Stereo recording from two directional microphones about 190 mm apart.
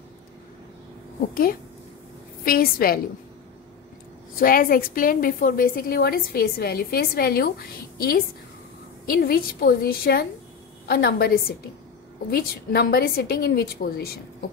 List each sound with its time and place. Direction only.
1.3 s a woman's voice: 50° left (ahead or behind)
4.4 s a woman's voice: 50° left (ahead or behind)
9.2 s a woman's voice: 50° left (ahead or behind)